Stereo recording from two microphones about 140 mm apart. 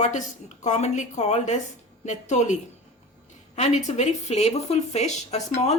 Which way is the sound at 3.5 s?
55° left (ahead or behind).